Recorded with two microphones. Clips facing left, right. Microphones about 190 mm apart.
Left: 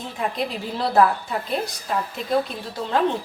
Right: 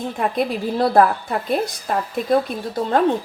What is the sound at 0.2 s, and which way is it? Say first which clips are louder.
A woman's voice: right 4 dB; 55° right (ahead or behind).